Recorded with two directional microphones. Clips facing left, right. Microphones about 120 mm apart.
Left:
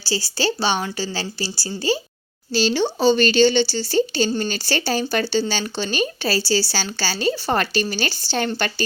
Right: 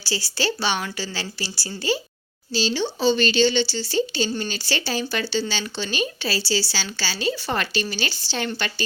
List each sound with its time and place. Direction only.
0.0 s speech: 35° left (ahead or behind)
2.5 s speech: 60° left (ahead or behind)